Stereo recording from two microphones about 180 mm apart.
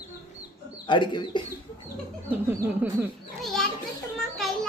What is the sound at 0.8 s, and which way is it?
Speech, 25° left (ahead or behind).